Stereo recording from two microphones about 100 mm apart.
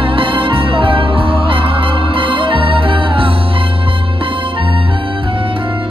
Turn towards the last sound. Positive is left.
turn(degrees=-65)  # may be behind; listen again after turning